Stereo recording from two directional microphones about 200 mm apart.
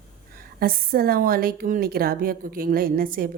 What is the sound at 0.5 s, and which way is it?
A woman's voice, 50° right (ahead or behind).